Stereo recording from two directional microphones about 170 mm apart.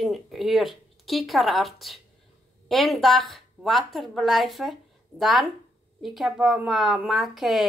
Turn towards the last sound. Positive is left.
turn(degrees=0)  # may be behind; listen again after turning